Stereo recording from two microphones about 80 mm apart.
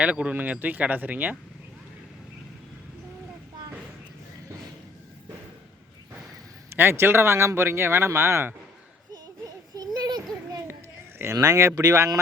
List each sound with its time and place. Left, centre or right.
0.0 s speech: centre
6.7 s speech: right
9.4 s children playing: right
11.2 s speech: right